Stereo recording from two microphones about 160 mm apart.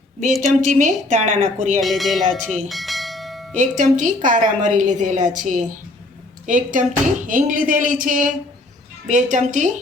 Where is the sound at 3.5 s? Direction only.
50° right (ahead or behind).